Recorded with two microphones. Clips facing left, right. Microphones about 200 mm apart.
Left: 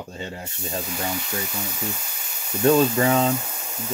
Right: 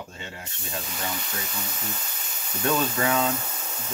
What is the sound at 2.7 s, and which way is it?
Speech, 35° left (ahead or behind).